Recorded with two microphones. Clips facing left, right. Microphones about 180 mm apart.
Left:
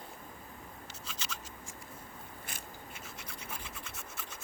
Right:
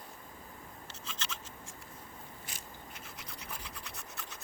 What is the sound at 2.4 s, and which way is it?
Biting, 55° left (ahead or behind).